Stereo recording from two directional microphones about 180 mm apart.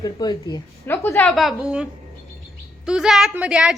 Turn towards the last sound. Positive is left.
turn(degrees=-5)  # may be behind; listen again after turning